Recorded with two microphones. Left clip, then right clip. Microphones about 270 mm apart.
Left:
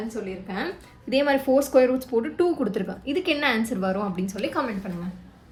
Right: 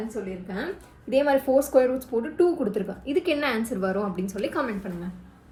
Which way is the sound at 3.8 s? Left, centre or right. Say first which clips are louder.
Even; left.